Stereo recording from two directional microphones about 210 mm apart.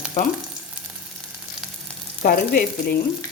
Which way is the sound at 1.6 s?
Centre (ahead or behind).